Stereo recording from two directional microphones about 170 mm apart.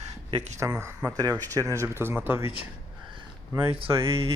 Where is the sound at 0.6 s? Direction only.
15° right (ahead or behind).